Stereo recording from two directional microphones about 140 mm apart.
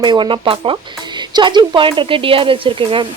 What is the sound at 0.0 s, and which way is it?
Speech, 35° right (ahead or behind).